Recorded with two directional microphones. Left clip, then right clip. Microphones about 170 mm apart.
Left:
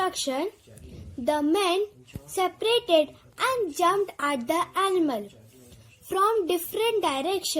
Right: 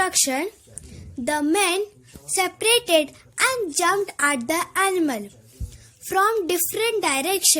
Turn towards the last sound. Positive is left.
turn(degrees=-55)  # may be behind; listen again after turning